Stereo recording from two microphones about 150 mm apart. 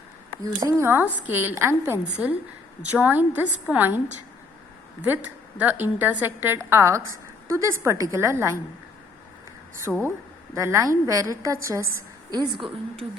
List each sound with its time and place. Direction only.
0.4 s a woman's voice: 20° right (ahead or behind)
5.0 s a woman's voice: 10° right (ahead or behind)
9.8 s a woman's voice: 15° right (ahead or behind); by 12.7 s 30° right (ahead or behind)